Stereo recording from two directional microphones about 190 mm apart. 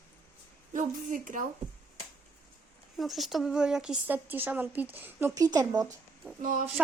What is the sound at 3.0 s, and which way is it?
Speech, centre (ahead or behind).